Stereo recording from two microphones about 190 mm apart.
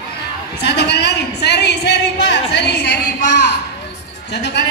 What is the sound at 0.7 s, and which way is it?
A woman's voice, 65° left (ahead or behind).